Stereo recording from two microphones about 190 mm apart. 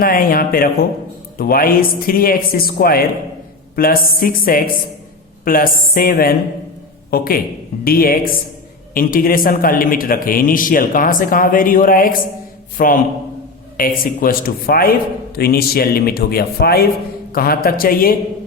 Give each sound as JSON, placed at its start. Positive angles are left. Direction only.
{"t": 0.0, "sound": "a man's voice", "side_deg": 50}